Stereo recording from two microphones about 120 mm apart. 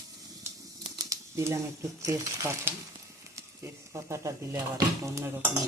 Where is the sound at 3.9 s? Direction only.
25° right (ahead or behind).